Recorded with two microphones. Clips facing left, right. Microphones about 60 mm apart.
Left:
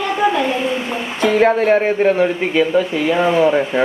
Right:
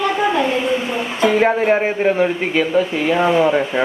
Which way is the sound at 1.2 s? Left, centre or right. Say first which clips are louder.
Left 1 dB; centre.